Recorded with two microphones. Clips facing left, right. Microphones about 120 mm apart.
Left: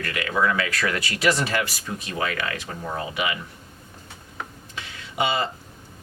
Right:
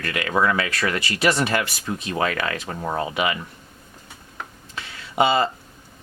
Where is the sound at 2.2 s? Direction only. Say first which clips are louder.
Right 3 dB; 40° right (ahead or behind).